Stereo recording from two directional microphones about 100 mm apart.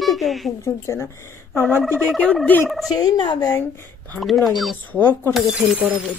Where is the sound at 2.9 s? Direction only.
35° left (ahead or behind).